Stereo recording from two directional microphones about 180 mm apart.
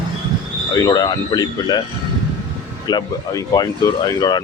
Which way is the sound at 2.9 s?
20° left (ahead or behind).